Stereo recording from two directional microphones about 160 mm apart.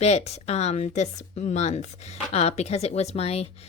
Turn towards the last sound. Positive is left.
turn(degrees=40)  # may be behind; listen again after turning